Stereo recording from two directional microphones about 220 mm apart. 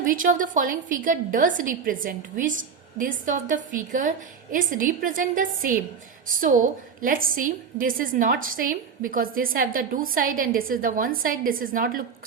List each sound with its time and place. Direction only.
0.0 s a woman's voice: 40° right (ahead or behind)